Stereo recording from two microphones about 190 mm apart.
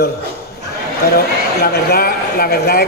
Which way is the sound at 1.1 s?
55° left (ahead or behind).